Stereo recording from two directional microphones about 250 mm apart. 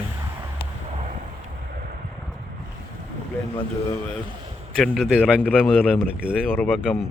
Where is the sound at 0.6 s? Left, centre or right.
Left.